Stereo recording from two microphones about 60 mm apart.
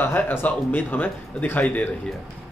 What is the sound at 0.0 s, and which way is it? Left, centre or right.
Speech, left.